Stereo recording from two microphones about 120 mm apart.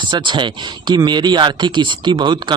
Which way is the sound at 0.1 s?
40° right (ahead or behind).